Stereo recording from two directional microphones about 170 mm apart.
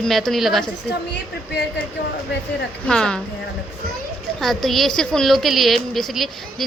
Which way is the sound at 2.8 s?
5° left (ahead or behind).